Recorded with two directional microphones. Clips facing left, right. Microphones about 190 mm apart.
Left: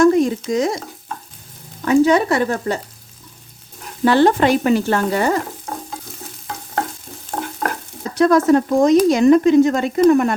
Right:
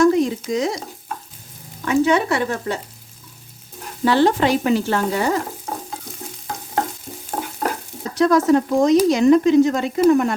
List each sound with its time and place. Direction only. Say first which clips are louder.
0.0 s stir: left 2 dB; 50° left (ahead or behind)
1.8 s speech: left 4 dB; 40° left (ahead or behind)
4.0 s frying: left 3 dB; 50° left (ahead or behind)
7.3 s stir: left 1 dB; 10° right (ahead or behind)
8.2 s frying: left 2 dB; 55° left (ahead or behind)
10.1 s speech: left 1 dB; 55° left (ahead or behind)